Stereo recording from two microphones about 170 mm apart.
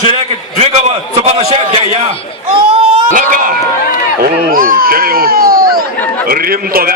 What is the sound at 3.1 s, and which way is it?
A man's voice, 50° right (ahead or behind).